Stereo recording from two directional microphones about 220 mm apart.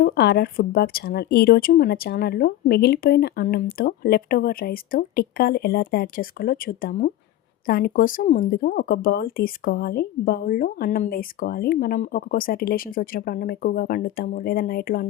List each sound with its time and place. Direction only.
0.0 s a woman's voice: 45° left (ahead or behind)